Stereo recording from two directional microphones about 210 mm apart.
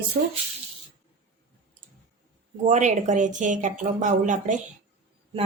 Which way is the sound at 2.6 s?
35° right (ahead or behind).